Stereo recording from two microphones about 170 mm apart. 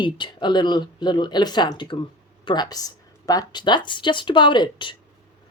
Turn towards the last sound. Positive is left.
turn(degrees=25)  # may be behind; listen again after turning